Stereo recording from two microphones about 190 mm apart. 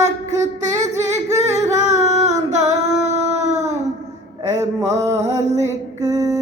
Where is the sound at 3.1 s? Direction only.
35° right (ahead or behind).